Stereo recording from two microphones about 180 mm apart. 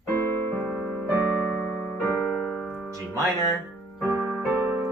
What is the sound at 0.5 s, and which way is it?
Keyboard, 10° left (ahead or behind).